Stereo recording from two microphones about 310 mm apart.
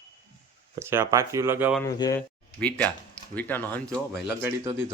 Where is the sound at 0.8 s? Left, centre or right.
Centre.